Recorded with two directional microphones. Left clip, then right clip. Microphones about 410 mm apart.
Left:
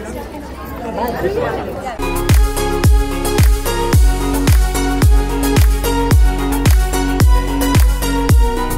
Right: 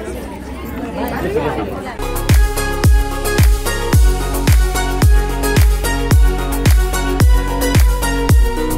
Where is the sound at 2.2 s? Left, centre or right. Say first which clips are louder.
Left 1 dB; centre.